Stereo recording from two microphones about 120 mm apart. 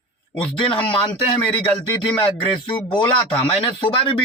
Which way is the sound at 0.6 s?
45° left (ahead or behind).